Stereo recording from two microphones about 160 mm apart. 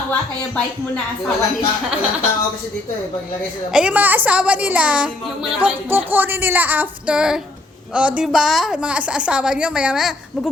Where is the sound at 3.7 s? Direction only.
5° right (ahead or behind).